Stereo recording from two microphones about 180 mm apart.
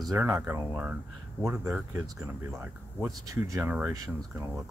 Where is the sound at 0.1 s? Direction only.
10° right (ahead or behind).